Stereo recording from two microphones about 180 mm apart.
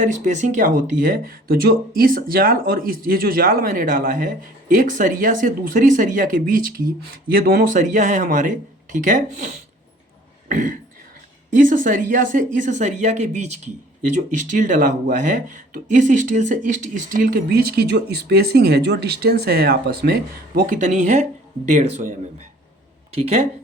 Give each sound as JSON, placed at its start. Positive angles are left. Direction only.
{"t": 0.0, "sound": "speech", "side_deg": -45}
{"t": 23.1, "sound": "speech", "side_deg": -35}